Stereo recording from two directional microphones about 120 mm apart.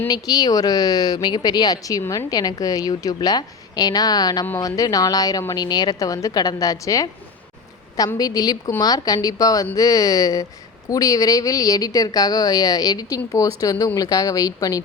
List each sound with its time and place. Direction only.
0.1 s a woman's voice: 35° left (ahead or behind)